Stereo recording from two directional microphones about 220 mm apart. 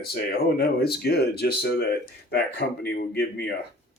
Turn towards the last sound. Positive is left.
turn(degrees=45)  # may be behind; listen again after turning